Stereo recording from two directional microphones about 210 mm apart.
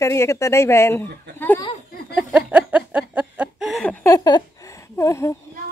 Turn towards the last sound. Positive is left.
turn(degrees=15)  # may be behind; listen again after turning